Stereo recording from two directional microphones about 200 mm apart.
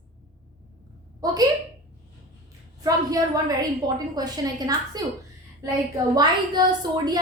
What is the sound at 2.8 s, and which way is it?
A woman's voice, 20° right (ahead or behind).